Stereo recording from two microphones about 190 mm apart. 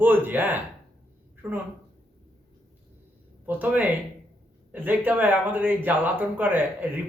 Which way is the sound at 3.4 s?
10° right (ahead or behind).